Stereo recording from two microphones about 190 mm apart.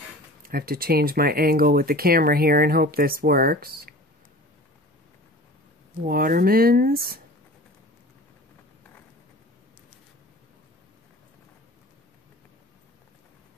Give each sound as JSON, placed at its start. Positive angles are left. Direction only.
{"t": 0.4, "sound": "speech", "side_deg": -50}
{"t": 6.0, "sound": "speech", "side_deg": -50}